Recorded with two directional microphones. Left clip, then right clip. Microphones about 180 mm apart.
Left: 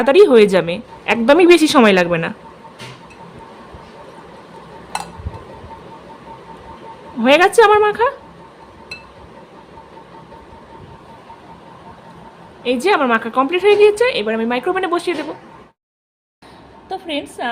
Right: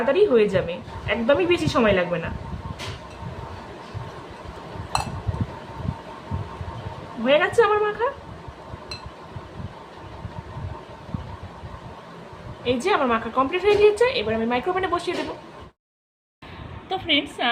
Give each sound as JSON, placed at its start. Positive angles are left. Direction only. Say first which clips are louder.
{"t": 0.0, "sound": "a woman's voice", "louder": "left 9 dB", "side_deg": 70}
{"t": 7.3, "sound": "a woman's voice", "louder": "left 8 dB", "side_deg": 70}
{"t": 12.6, "sound": "a woman's voice", "louder": "left 6 dB", "side_deg": 50}